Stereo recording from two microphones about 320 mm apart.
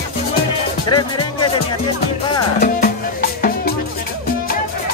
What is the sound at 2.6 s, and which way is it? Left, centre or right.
Music, left.